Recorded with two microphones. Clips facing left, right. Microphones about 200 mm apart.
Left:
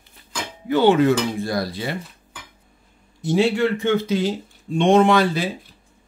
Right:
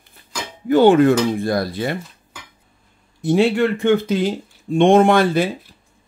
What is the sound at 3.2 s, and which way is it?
Speech, 55° right (ahead or behind).